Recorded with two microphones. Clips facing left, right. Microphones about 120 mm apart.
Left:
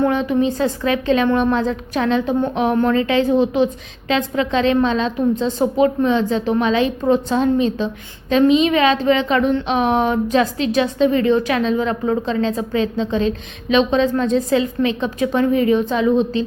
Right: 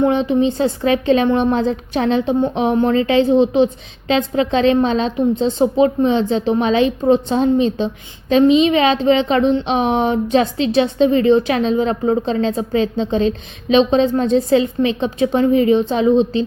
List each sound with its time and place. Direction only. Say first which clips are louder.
0.0 s a woman's voice: right 2 dB; 25° right (ahead or behind)